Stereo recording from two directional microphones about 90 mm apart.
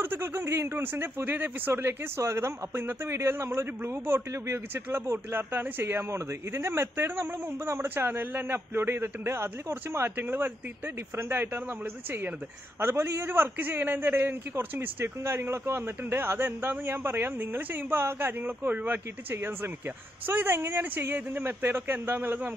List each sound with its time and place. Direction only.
0.0 s speech: 25° right (ahead or behind)
12.8 s speech: 30° right (ahead or behind)